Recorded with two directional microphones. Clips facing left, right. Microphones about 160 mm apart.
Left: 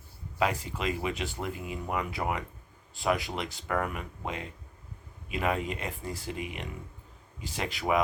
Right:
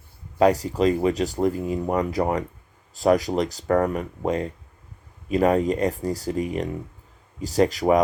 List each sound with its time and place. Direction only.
0.3 s speech: 40° right (ahead or behind)